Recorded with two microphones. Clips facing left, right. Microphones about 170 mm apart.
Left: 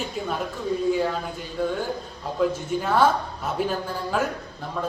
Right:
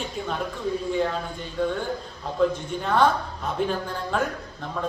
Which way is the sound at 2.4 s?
5° left (ahead or behind).